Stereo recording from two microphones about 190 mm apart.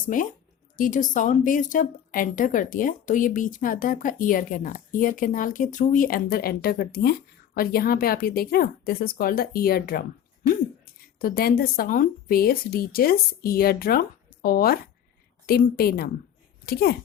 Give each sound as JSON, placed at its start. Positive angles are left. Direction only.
{"t": 0.1, "sound": "a woman's voice", "side_deg": 45}
{"t": 11.2, "sound": "a woman's voice", "side_deg": 50}